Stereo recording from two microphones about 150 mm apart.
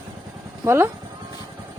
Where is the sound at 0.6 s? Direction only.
15° right (ahead or behind).